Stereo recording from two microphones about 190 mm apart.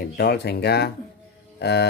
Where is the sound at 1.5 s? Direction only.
60° left (ahead or behind).